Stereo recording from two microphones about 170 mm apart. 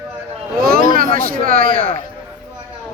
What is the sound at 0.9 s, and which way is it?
Speech, 55° right (ahead or behind).